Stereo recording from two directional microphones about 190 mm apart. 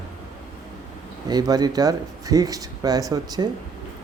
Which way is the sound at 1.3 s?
20° right (ahead or behind).